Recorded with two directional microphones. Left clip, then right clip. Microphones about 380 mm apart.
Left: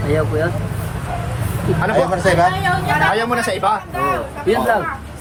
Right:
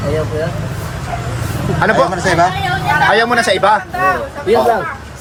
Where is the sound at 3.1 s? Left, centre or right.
Right.